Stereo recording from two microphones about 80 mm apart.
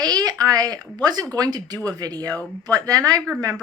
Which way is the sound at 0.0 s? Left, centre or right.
Right.